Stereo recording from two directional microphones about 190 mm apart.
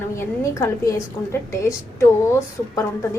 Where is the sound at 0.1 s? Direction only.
15° left (ahead or behind).